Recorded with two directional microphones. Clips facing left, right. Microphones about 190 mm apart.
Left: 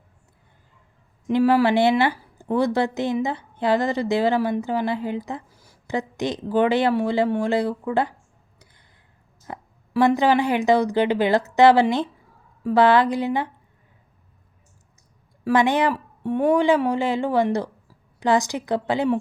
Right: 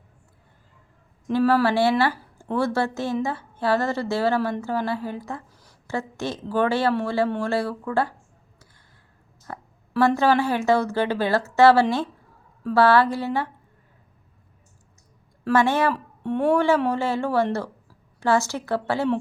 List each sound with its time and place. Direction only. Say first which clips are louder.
1.3 s a woman's voice: left 2 dB; 15° left (ahead or behind)
9.5 s a woman's voice: left 2 dB; 15° left (ahead or behind)
15.4 s a woman's voice: left 1 dB; 15° left (ahead or behind)